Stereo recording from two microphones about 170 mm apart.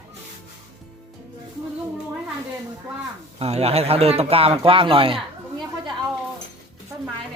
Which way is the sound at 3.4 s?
35° right (ahead or behind).